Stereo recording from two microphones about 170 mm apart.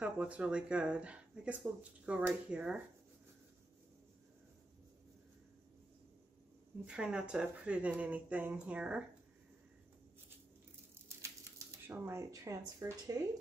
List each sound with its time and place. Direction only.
0.0 s speech: 5° right (ahead or behind)
6.8 s speech: 5° right (ahead or behind)
11.1 s speech: 15° right (ahead or behind)